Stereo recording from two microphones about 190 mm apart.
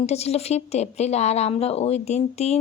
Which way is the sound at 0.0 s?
35° left (ahead or behind).